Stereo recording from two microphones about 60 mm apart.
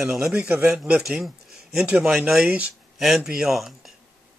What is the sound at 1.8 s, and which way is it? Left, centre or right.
Speech, right.